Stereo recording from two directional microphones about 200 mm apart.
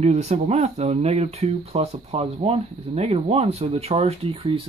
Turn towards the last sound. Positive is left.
turn(degrees=-25)  # may be behind; listen again after turning